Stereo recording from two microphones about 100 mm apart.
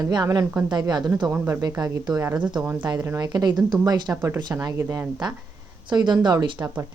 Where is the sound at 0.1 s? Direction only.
40° right (ahead or behind).